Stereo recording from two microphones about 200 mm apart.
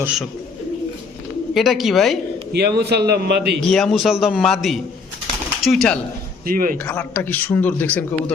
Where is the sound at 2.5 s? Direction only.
55° right (ahead or behind).